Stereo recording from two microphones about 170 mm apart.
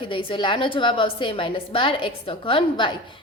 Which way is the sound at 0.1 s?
30° left (ahead or behind).